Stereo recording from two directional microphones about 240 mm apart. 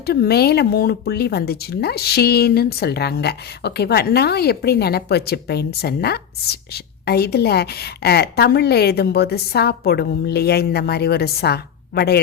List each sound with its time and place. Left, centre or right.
0.0 s speech: left